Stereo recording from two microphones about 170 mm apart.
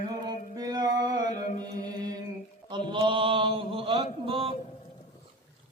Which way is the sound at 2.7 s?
30° right (ahead or behind).